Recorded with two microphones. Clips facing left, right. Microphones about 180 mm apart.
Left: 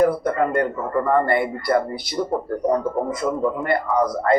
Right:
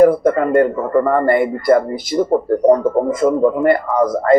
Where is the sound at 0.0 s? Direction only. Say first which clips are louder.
Right 7 dB; 50° right (ahead or behind).